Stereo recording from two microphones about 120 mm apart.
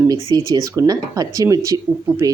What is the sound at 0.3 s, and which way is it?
Speech, 30° right (ahead or behind).